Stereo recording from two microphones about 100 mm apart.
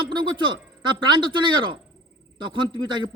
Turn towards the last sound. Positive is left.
turn(degrees=-50)  # may be behind; listen again after turning